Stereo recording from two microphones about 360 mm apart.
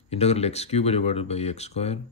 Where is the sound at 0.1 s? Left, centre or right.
Centre.